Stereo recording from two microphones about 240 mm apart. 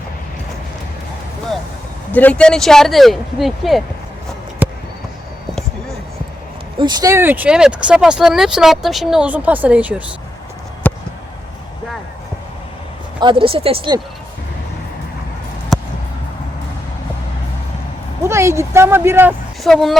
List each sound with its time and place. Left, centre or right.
2.1 s speech: centre
4.6 s basketball bounce: centre
6.7 s speech: centre
10.8 s a sound: centre
13.1 s speech: right
18.2 s speech: centre
19.6 s speech: centre